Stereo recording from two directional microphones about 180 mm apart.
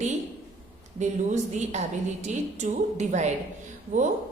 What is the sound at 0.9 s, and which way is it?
A woman's voice, 40° right (ahead or behind).